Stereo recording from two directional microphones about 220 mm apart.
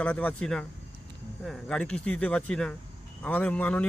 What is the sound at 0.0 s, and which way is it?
Speech, 5° left (ahead or behind).